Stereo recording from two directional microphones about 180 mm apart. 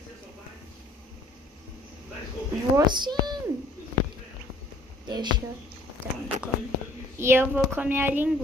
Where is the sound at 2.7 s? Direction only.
25° right (ahead or behind).